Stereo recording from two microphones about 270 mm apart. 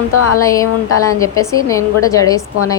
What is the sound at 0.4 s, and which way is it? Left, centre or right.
A woman's voice, centre.